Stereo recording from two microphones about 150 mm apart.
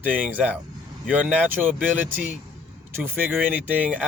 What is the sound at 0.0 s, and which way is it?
Speech, 10° right (ahead or behind).